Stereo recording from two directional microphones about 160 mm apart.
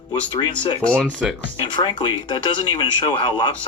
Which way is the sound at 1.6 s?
30° left (ahead or behind).